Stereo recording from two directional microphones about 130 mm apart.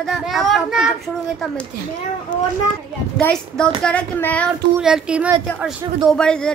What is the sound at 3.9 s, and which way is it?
Speech, 10° left (ahead or behind).